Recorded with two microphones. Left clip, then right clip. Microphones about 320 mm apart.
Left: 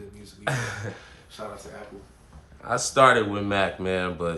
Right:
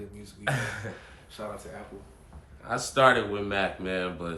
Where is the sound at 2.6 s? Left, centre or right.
Left.